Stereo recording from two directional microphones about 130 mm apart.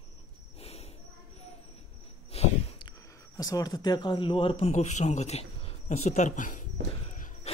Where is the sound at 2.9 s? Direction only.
30° left (ahead or behind); by 4.7 s 45° left (ahead or behind).